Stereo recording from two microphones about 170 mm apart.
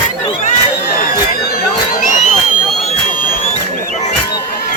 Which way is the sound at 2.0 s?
50° left (ahead or behind).